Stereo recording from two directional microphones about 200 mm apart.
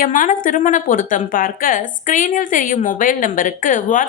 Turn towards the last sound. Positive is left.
turn(degrees=40)  # may be behind; listen again after turning